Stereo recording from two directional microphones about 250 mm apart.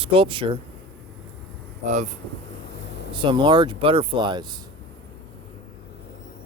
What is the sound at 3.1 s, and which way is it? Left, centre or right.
Speech, centre.